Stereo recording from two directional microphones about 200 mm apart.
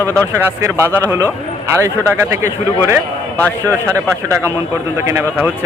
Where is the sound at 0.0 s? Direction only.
15° right (ahead or behind).